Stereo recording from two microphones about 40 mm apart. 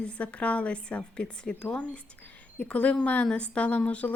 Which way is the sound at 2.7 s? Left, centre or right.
Left.